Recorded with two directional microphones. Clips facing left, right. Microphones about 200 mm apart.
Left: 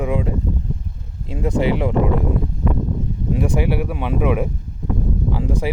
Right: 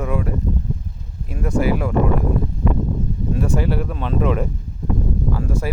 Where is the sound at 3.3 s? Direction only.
15° left (ahead or behind).